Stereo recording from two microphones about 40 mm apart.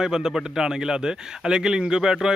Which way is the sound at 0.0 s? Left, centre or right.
Centre.